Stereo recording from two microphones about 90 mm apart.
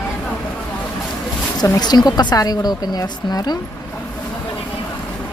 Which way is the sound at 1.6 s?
40° left (ahead or behind).